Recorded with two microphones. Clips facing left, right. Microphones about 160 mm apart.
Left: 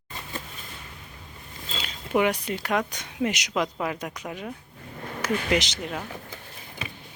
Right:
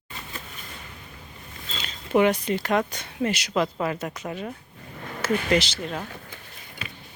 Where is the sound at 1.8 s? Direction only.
5° left (ahead or behind).